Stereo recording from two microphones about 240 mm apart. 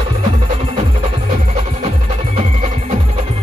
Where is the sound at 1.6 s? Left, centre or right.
Right.